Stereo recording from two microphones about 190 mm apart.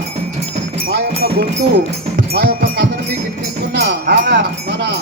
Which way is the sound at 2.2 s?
55° right (ahead or behind).